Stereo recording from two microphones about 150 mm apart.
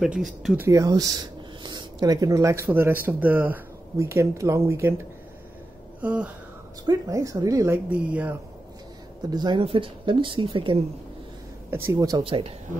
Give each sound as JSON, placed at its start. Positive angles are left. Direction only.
{"t": 0.0, "sound": "speech", "side_deg": 0}
{"t": 0.6, "sound": "speech", "side_deg": -20}
{"t": 5.9, "sound": "a sound", "side_deg": -10}
{"t": 6.9, "sound": "speech", "side_deg": -20}
{"t": 9.3, "sound": "speech", "side_deg": -30}
{"t": 11.7, "sound": "speech", "side_deg": -15}
{"t": 12.2, "sound": "speech", "side_deg": -40}